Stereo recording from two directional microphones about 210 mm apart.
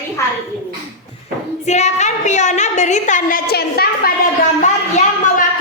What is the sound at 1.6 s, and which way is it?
A woman's voice, 35° left (ahead or behind).